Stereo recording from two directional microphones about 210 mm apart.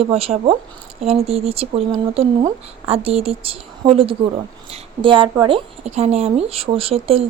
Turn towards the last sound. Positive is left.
turn(degrees=-25)  # may be behind; listen again after turning